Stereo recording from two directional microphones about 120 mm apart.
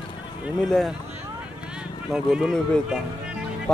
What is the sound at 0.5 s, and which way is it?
Speech, 5° left (ahead or behind).